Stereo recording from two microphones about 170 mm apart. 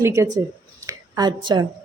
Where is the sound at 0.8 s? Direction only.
25° right (ahead or behind).